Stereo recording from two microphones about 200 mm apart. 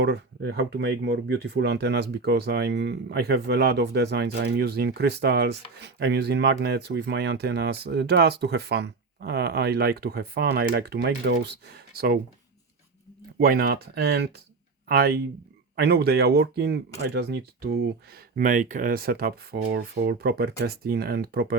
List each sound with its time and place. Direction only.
0.0 s speech: 55° right (ahead or behind)
13.4 s speech: 45° right (ahead or behind)
18.3 s speech: 40° right (ahead or behind)